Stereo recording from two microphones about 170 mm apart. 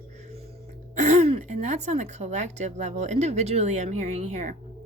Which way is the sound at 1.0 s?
45° right (ahead or behind).